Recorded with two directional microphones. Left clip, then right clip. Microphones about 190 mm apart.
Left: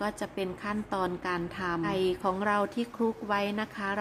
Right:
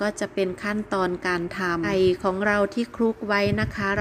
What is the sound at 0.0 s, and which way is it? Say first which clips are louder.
A woman's voice: right 8 dB; 15° right (ahead or behind).